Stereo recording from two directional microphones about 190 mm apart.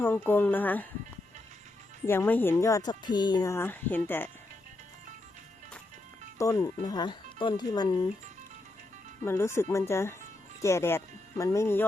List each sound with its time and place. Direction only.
0.0 s speech: 10° left (ahead or behind)
2.0 s speech: 10° left (ahead or behind)
6.4 s speech: 15° left (ahead or behind)
9.2 s speech: 15° left (ahead or behind)